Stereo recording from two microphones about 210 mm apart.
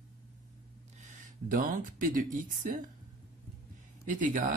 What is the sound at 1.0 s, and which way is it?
Speech, 40° right (ahead or behind).